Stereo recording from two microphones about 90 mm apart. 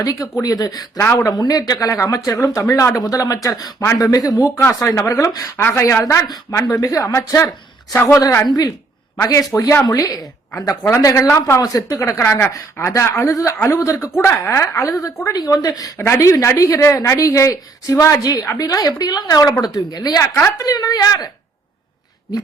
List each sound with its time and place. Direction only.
0.0 s a woman's voice: 45° left (ahead or behind)
0.9 s speech: 30° left (ahead or behind)
5.5 s a woman's voice: 25° left (ahead or behind)
8.4 s a woman's voice: 45° left (ahead or behind); by 11.6 s 30° left (ahead or behind)
11.6 s speech: 45° left (ahead or behind)
12.2 s a woman's voice: 25° left (ahead or behind); by 15.9 s 45° left (ahead or behind)
16.0 s a woman's voice: 35° left (ahead or behind)